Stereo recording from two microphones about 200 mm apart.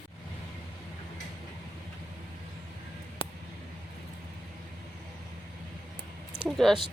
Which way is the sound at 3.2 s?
30° left (ahead or behind).